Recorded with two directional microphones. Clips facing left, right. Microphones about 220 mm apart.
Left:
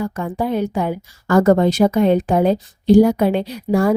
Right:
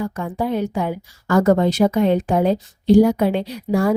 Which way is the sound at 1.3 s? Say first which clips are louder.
Left 2 dB; 45° left (ahead or behind).